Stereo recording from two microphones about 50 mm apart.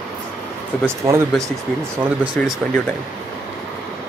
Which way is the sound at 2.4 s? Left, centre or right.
Left.